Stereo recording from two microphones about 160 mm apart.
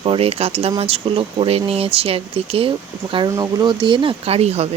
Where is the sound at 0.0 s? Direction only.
35° right (ahead or behind).